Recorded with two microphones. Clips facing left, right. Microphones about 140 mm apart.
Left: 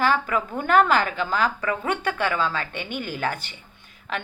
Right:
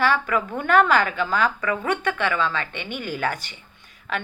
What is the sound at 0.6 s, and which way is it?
A woman's voice, 35° left (ahead or behind).